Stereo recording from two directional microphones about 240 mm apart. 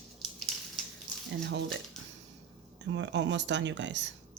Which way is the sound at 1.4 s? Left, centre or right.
Right.